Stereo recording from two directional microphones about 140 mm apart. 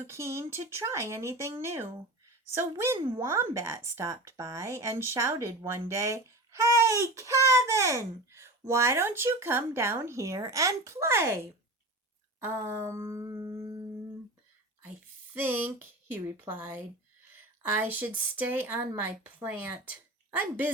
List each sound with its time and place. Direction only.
0.1 s a child's voice: 20° right (ahead or behind)
12.4 s a sound: 15° right (ahead or behind)
14.8 s a woman's voice: 15° right (ahead or behind)